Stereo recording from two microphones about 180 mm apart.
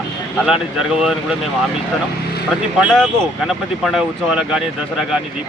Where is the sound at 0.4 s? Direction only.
5° right (ahead or behind).